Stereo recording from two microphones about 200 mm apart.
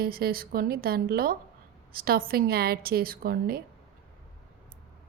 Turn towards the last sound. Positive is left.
turn(degrees=-50)  # may be behind; listen again after turning